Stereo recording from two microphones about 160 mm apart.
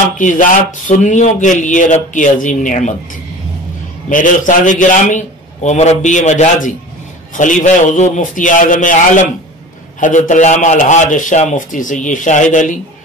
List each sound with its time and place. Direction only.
0.2 s a man's voice: 55° left (ahead or behind)
4.1 s a man's voice: 55° left (ahead or behind)